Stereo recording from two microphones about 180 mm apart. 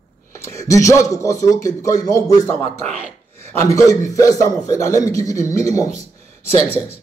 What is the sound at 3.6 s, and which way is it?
A man's voice, 20° left (ahead or behind).